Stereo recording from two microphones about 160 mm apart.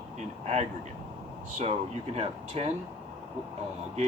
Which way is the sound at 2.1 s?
40° right (ahead or behind).